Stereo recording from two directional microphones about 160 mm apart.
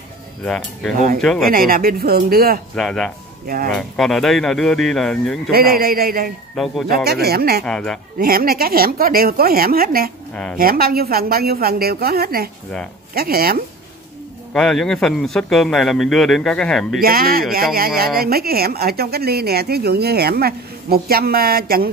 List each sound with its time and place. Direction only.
1.4 s speech: 65° right (ahead or behind)
2.7 s a man's voice: 5° left (ahead or behind)
3.4 s speech: 65° right (ahead or behind)
3.7 s a man's voice: centre (ahead or behind)
5.5 s a woman's voice: 70° right (ahead or behind)
6.5 s a man's voice: centre (ahead or behind)
7.1 s a woman's voice: 75° right (ahead or behind)
7.6 s a man's voice: 5° left (ahead or behind)
8.2 s a woman's voice: 70° right (ahead or behind)
14.5 s a man's voice: 5° left (ahead or behind)
17.0 s a woman's voice: 65° right (ahead or behind)